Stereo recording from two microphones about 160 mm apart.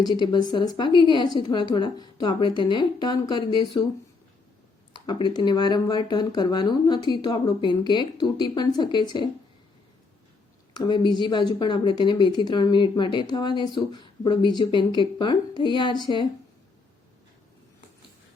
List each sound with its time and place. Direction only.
0.0 s speech: 25° left (ahead or behind)
4.9 s speech: 30° left (ahead or behind)
10.8 s speech: 30° left (ahead or behind)